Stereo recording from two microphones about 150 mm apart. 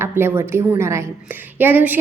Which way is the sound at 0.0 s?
15° right (ahead or behind).